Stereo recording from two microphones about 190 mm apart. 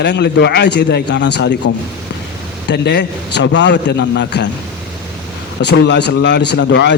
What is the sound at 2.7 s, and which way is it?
A man's voice, 65° left (ahead or behind).